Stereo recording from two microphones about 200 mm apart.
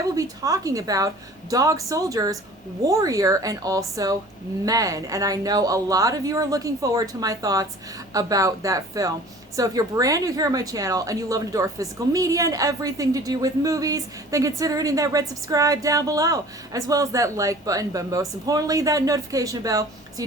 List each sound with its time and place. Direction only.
0.2 s a woman's voice: 15° right (ahead or behind)